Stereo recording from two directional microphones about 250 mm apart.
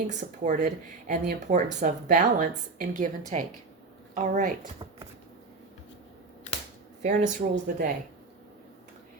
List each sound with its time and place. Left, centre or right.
0.1 s speech: right
7.0 s speech: right